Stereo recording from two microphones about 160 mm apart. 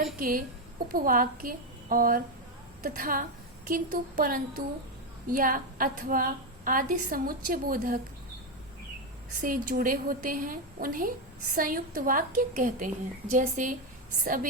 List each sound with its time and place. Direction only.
0.2 s a woman's voice: 60° right (ahead or behind)
9.4 s a woman's voice: 55° right (ahead or behind)